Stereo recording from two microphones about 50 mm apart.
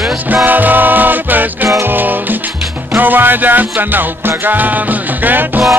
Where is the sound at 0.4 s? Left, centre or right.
Right.